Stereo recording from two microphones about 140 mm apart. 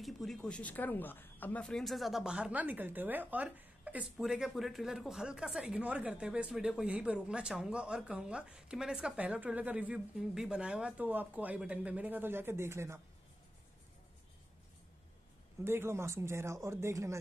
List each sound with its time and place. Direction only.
0.0 s speech: centre (ahead or behind); by 13.0 s 20° right (ahead or behind)
15.6 s speech: 15° right (ahead or behind)